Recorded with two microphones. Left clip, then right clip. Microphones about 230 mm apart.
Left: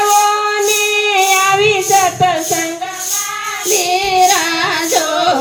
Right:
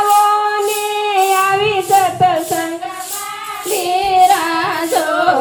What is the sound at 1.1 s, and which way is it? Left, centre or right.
Child singing, left.